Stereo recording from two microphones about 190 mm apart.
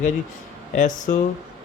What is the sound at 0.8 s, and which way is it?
Speech, 40° left (ahead or behind).